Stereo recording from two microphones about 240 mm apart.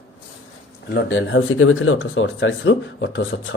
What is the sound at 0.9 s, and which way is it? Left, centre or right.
Speech, left.